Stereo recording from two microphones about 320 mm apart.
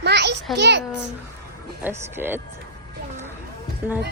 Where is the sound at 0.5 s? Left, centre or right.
Right.